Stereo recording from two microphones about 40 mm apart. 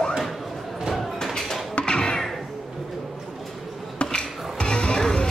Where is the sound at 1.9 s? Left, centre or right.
Centre.